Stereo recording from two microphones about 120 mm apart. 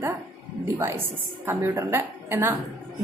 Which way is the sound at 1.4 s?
20° right (ahead or behind).